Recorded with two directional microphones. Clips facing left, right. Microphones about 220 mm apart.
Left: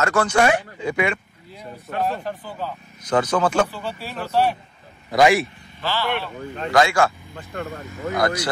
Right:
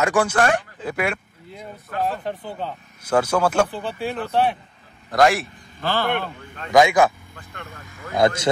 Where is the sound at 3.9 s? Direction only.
55° right (ahead or behind).